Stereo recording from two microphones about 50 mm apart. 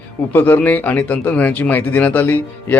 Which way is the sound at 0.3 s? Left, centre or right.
Left.